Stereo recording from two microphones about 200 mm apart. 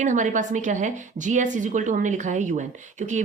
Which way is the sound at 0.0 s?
40° right (ahead or behind).